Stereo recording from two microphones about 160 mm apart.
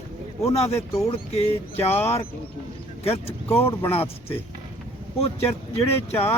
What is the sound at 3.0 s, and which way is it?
Speech, 40° left (ahead or behind).